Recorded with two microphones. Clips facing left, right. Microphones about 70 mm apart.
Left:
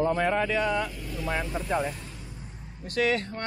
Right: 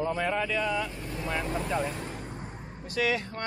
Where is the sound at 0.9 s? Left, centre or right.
Right.